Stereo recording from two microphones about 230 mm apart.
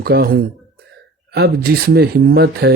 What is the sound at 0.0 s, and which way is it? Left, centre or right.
Speech, right.